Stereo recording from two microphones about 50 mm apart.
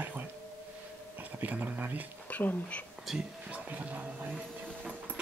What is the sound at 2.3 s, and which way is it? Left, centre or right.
Speech, left.